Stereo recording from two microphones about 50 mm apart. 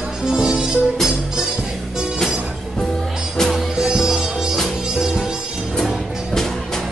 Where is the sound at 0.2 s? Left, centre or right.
Centre.